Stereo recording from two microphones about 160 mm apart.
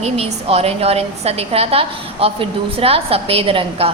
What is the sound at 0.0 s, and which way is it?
A woman's voice, 40° right (ahead or behind).